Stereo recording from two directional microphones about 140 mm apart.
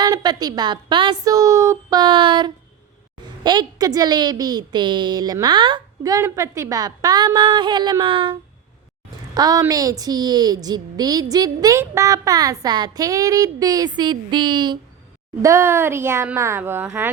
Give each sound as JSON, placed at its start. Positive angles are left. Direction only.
{"t": 0.0, "sound": "a woman's voice", "side_deg": -30}
{"t": 9.3, "sound": "a woman's voice", "side_deg": -25}
{"t": 15.4, "sound": "speech", "side_deg": -20}